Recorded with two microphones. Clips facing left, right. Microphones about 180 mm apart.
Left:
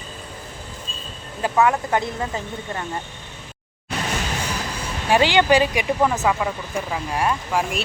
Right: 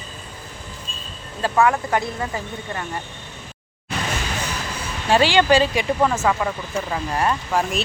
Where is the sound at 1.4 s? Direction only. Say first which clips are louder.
Even; 20° left (ahead or behind).